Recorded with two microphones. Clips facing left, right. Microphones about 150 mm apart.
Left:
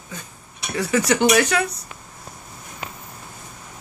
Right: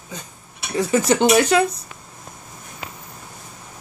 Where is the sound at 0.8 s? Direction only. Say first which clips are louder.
Right 2 dB; 25° right (ahead or behind).